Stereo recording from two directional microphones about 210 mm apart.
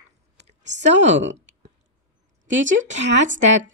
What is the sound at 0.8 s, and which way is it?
Speech, 60° right (ahead or behind).